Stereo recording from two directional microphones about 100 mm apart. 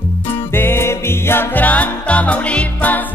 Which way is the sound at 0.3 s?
20° left (ahead or behind).